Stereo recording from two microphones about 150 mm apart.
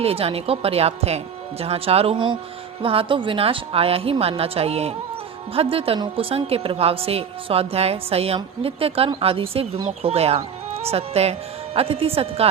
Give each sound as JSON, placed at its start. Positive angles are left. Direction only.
{"t": 0.0, "sound": "a woman's voice", "side_deg": -40}